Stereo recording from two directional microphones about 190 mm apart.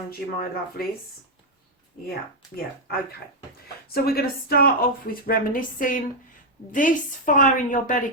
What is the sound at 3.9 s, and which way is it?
A woman's voice, 55° left (ahead or behind).